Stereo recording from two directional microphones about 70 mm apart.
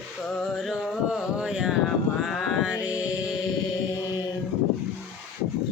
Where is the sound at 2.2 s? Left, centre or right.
Centre.